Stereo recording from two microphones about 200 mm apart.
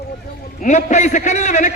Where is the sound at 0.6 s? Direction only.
35° left (ahead or behind).